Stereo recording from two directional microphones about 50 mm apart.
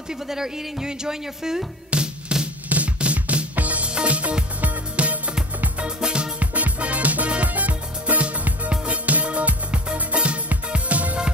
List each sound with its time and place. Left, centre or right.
0.3 s speech: centre
1.9 s music: right